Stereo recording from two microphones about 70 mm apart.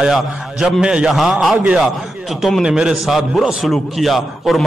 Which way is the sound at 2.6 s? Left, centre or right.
Centre.